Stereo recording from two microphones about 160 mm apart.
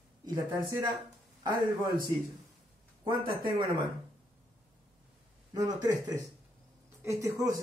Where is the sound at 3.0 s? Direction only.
30° right (ahead or behind).